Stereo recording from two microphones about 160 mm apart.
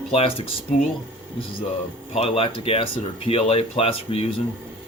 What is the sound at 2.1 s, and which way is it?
Speech, 35° left (ahead or behind).